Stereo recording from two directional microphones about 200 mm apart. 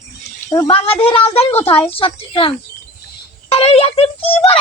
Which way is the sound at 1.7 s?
10° left (ahead or behind).